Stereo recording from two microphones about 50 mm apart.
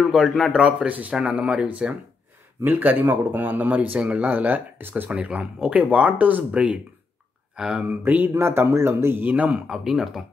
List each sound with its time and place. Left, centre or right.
0.1 s a man's voice: centre
0.5 s speech: centre
1.1 s speech: right
2.6 s speech: right
5.1 s speech: right
7.8 s speech: right
8.3 s speech: right
9.7 s speech: centre